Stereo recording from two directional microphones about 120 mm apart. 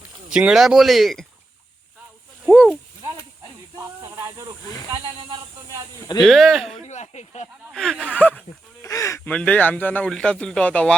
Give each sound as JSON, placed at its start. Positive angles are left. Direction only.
{"t": 0.3, "sound": "speech", "side_deg": -10}
{"t": 2.5, "sound": "a sound", "side_deg": 5}
{"t": 3.8, "sound": "snake", "side_deg": -25}
{"t": 6.2, "sound": "speech", "side_deg": 0}
{"t": 6.8, "sound": "speech", "side_deg": 70}
{"t": 7.7, "sound": "speech", "side_deg": 5}
{"t": 8.8, "sound": "goose", "side_deg": 25}
{"t": 9.2, "sound": "speech", "side_deg": 10}